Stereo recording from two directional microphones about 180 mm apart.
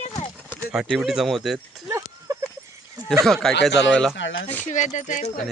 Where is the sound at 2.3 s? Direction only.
20° right (ahead or behind).